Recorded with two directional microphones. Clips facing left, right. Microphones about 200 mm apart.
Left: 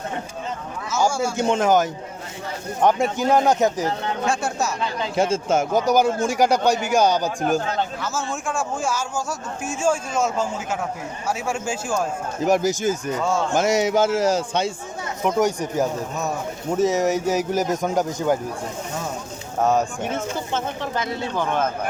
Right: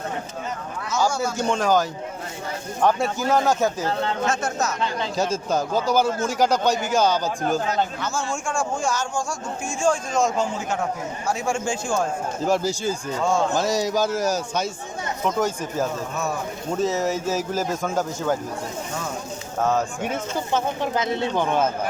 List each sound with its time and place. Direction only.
1.4 s speech: 20° left (ahead or behind)
5.2 s speech: 25° left (ahead or behind)
8.0 s speech: centre (ahead or behind)
12.5 s speech: 15° left (ahead or behind)
15.2 s speech: 15° left (ahead or behind)
20.9 s speech: 20° right (ahead or behind)